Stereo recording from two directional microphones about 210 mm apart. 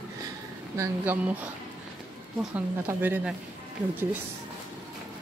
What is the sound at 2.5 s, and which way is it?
Speech, 10° right (ahead or behind).